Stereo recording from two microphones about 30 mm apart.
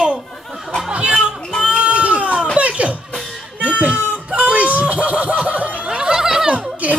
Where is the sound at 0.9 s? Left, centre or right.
Right.